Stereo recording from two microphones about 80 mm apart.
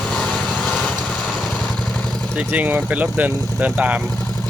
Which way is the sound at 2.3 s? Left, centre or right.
Centre.